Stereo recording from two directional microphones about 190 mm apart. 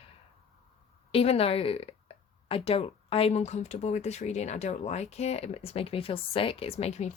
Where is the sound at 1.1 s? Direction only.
30° left (ahead or behind).